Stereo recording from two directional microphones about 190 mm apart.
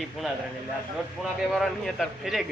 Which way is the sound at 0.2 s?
Centre (ahead or behind).